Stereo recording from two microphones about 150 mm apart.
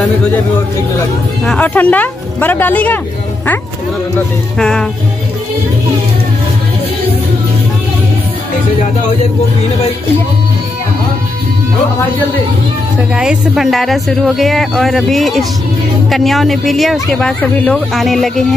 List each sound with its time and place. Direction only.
1.4 s speech: 5° left (ahead or behind)
4.6 s speech: 5° left (ahead or behind)
13.1 s speech: 5° right (ahead or behind)